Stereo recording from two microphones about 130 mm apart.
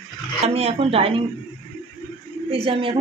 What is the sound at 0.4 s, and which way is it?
Speech, 50° right (ahead or behind).